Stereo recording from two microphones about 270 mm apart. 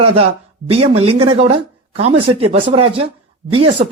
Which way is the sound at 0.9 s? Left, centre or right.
Right.